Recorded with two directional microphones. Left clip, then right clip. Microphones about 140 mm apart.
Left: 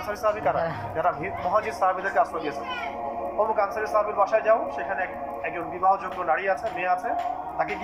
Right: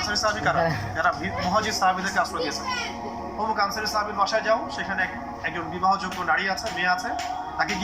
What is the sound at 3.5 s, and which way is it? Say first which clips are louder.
A man's voice: right 2 dB; 55° left (ahead or behind).